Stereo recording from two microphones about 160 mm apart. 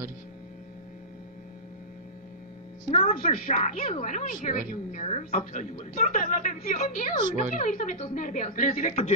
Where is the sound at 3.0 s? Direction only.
50° left (ahead or behind).